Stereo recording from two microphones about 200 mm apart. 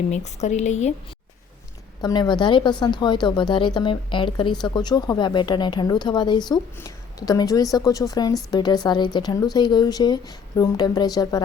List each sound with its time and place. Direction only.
0.1 s a woman's voice: 35° left (ahead or behind)
2.0 s a woman's voice: 20° left (ahead or behind)